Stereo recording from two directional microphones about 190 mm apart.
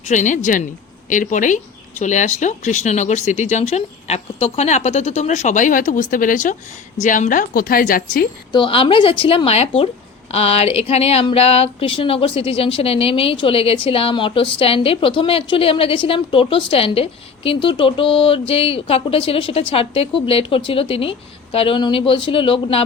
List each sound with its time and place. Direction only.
0.0 s a woman's voice: 40° left (ahead or behind)
8.5 s a woman's voice: 25° left (ahead or behind)